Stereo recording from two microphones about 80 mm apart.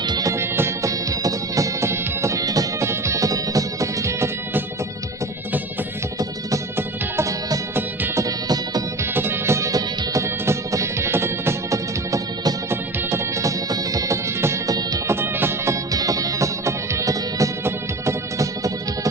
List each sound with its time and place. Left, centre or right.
0.0 s music: right
0.3 s music: right
2.8 s music: right
6.7 s music: right
9.1 s music: right
12.7 s music: right
13.7 s music: right
14.7 s music: right
15.0 s music: right
15.9 s music: right